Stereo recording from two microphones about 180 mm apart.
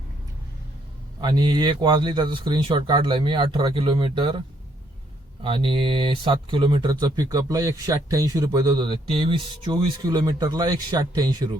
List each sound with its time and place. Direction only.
1.2 s speech: 25° right (ahead or behind)